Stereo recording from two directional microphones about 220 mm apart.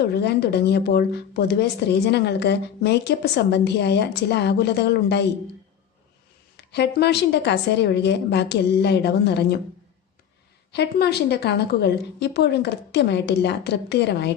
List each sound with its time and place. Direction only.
0.0 s speech: 50° left (ahead or behind)
6.6 s speech: 50° left (ahead or behind)
10.7 s speech: 50° left (ahead or behind)